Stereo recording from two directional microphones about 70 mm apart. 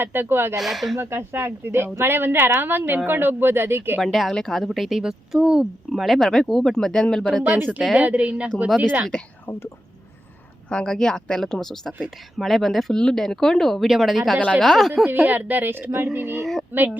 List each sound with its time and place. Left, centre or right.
0.0 s speech: right
0.5 s speech: centre
0.9 s speech: right
4.0 s speech: centre
5.9 s speech: centre
7.4 s speech: right
9.5 s speech: left
10.7 s speech: centre
15.0 s speech: right
16.4 s a sound: centre
16.7 s speech: right